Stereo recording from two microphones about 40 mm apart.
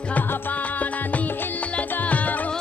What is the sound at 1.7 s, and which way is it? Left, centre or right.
Music, left.